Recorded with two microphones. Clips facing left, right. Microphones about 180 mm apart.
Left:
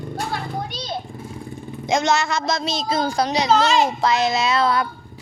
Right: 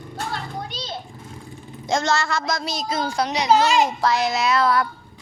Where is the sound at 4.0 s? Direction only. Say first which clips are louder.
Left 1 dB; 25° left (ahead or behind).